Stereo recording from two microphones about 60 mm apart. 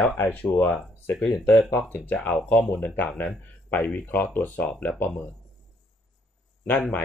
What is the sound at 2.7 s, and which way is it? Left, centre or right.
Speech, left.